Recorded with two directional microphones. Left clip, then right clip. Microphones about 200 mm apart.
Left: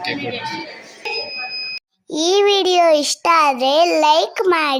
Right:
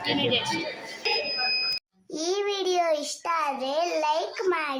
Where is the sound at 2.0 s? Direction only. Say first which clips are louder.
Left 14 dB; 30° left (ahead or behind).